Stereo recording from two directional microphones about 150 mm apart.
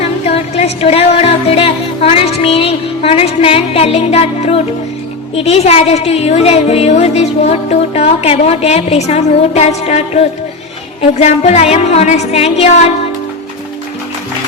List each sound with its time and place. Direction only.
0.0 s music: 45° left (ahead or behind)
5.3 s a woman's voice: 45° left (ahead or behind)